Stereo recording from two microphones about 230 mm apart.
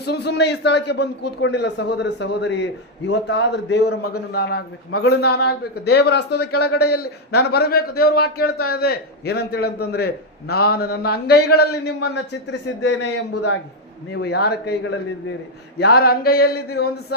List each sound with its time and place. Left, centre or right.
0.0 s a man's voice: left
15.8 s mantra: left
16.7 s a man's voice: left